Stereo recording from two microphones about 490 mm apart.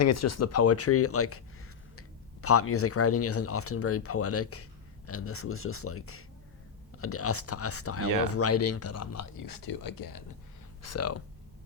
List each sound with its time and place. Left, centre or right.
0.0 s speech: left
10.8 s speech: left